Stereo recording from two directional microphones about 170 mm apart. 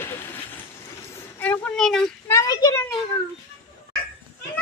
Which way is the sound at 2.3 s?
20° left (ahead or behind).